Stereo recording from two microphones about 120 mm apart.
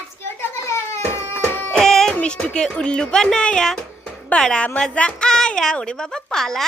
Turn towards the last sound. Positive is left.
turn(degrees=5)  # may be behind; listen again after turning